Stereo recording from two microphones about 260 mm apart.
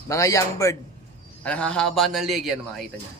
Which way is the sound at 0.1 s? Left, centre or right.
Centre.